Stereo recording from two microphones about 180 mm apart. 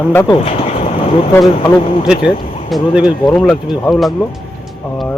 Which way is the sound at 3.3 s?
10° left (ahead or behind).